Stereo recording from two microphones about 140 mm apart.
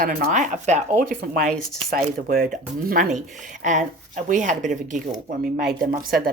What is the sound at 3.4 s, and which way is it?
Speech, 60° right (ahead or behind).